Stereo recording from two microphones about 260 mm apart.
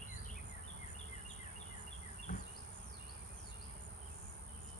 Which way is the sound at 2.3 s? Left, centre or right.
Left.